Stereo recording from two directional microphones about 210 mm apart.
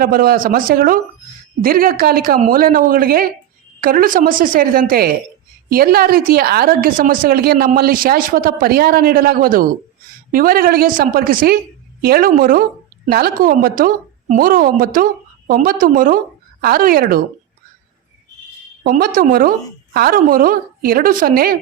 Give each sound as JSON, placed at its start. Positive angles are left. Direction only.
{"t": 0.0, "sound": "a woman's voice", "side_deg": -45}
{"t": 18.8, "sound": "a woman's voice", "side_deg": -40}